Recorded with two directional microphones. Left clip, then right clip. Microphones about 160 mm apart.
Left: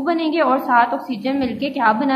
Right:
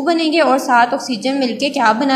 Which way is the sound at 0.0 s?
35° right (ahead or behind).